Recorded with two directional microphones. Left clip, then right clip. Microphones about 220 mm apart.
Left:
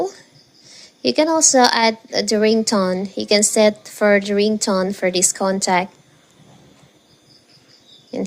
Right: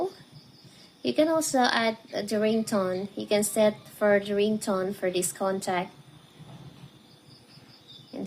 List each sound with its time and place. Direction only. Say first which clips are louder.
1.0 s a woman's voice: left 9 dB; 35° left (ahead or behind)